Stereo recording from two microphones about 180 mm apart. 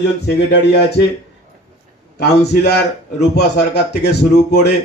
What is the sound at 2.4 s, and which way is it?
A man's voice, 65° left (ahead or behind).